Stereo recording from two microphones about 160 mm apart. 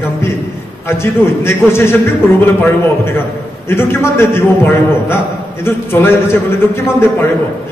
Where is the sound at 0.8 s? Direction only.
15° left (ahead or behind).